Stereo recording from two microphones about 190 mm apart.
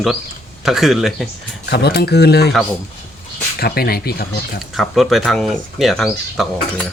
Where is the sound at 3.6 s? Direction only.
55° left (ahead or behind).